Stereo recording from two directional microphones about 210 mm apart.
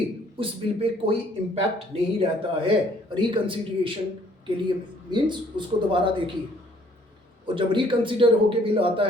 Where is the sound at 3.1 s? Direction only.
25° right (ahead or behind).